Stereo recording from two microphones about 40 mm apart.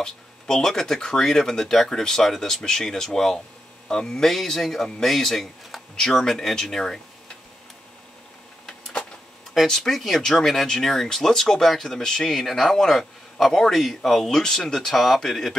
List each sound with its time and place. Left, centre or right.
0.0 s speech: centre
9.7 s speech: centre
12.3 s speech: centre
14.4 s speech: centre
15.0 s speech: centre